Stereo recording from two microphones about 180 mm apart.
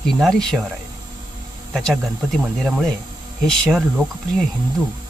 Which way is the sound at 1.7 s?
Centre (ahead or behind).